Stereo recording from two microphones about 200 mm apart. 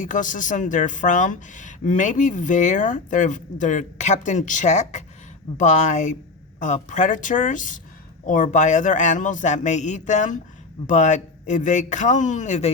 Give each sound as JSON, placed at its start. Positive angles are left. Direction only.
{"t": 0.0, "sound": "speech", "side_deg": 40}